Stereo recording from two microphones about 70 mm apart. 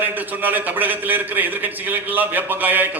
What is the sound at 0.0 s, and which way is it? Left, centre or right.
A man's voice, right.